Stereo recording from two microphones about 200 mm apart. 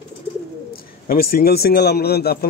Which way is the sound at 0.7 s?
50° left (ahead or behind).